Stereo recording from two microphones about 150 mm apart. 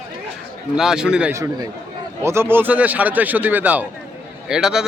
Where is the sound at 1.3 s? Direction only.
20° right (ahead or behind).